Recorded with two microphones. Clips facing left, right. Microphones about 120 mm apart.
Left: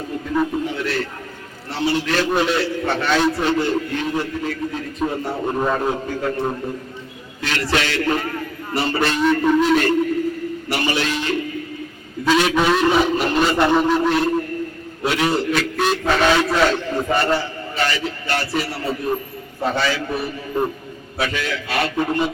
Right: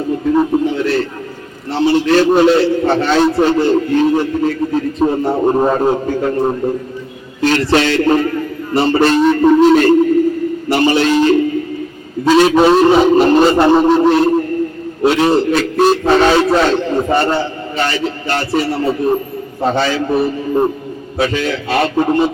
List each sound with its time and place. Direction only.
0.3 s a man's voice: 30° right (ahead or behind)
10.7 s a sound: 30° right (ahead or behind)
12.2 s a man's voice: 35° right (ahead or behind)